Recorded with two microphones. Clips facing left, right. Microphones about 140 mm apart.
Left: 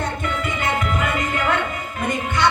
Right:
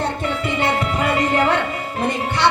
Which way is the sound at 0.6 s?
35° right (ahead or behind).